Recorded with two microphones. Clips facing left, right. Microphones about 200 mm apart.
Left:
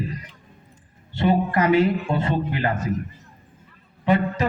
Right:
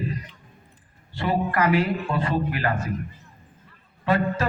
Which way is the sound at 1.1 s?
25° left (ahead or behind).